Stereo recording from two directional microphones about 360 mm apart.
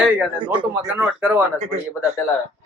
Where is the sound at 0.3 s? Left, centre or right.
Centre.